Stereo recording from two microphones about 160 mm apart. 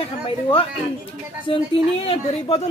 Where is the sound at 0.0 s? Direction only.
35° left (ahead or behind).